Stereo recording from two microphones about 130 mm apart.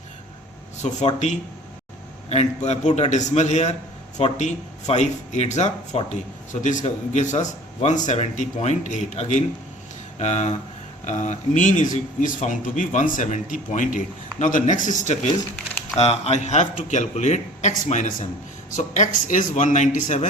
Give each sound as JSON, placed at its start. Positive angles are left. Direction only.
{"t": 0.8, "sound": "a man's voice", "side_deg": 65}
{"t": 2.3, "sound": "a man's voice", "side_deg": 55}
{"t": 16.0, "sound": "a man's voice", "side_deg": 55}
{"t": 19.3, "sound": "speech", "side_deg": 75}